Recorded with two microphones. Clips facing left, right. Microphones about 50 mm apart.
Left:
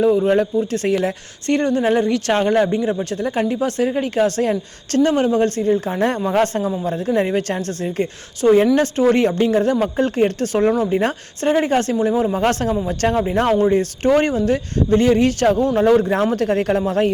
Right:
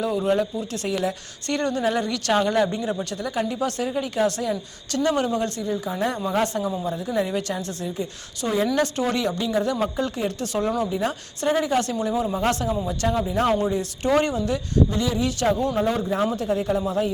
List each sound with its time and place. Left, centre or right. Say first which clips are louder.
0.0 s speech: left 7 dB; left
0.3 s a woman's voice: left 7 dB; left
3.0 s a woman's voice: left 6 dB; left
5.1 s a woman's voice: left 7 dB; left
8.6 s a woman's voice: left 7 dB; left